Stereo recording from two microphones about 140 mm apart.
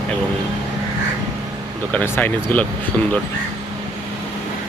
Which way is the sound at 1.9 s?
10° left (ahead or behind).